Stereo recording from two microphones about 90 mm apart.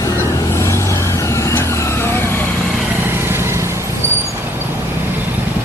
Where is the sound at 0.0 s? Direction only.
30° left (ahead or behind).